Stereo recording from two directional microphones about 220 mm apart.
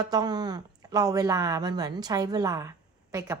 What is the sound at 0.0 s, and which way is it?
A woman's voice, 15° right (ahead or behind).